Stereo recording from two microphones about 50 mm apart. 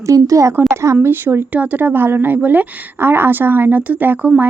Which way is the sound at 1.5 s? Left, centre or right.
Right.